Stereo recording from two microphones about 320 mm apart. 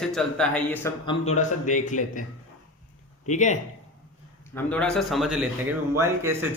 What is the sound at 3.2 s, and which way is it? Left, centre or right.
Speech, left.